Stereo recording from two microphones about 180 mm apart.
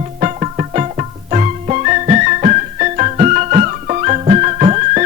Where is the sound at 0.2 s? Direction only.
40° right (ahead or behind).